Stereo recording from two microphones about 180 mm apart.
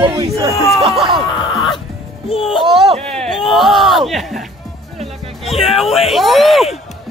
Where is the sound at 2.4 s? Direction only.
Centre (ahead or behind).